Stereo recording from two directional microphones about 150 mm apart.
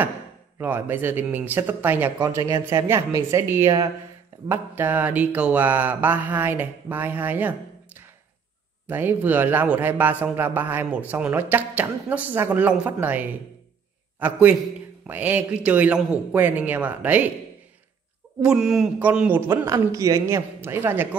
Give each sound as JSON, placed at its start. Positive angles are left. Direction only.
{"t": 0.6, "sound": "mantra", "side_deg": -10}
{"t": 2.2, "sound": "speech", "side_deg": -25}
{"t": 2.6, "sound": "mantra", "side_deg": -20}
{"t": 15.0, "sound": "mantra", "side_deg": -10}
{"t": 18.4, "sound": "mantra", "side_deg": -5}